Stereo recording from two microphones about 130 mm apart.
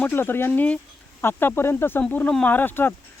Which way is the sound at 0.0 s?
15° left (ahead or behind).